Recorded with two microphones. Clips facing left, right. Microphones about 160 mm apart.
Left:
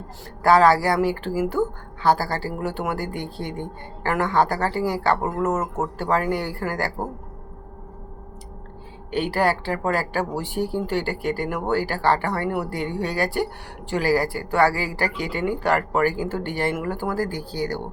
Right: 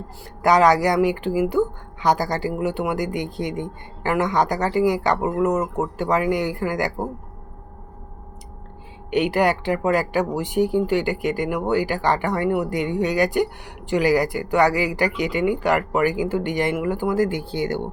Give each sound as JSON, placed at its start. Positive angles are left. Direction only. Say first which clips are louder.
{"t": 0.4, "sound": "a woman's voice", "louder": "even", "side_deg": -15}
{"t": 5.2, "sound": "speech", "louder": "right 3 dB", "side_deg": 0}
{"t": 6.0, "sound": "speech", "louder": "right 2 dB", "side_deg": -15}
{"t": 9.0, "sound": "speech", "louder": "right 3 dB", "side_deg": -20}